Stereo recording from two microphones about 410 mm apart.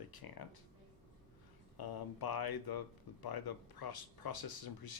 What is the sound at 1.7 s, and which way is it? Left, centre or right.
Speech, left.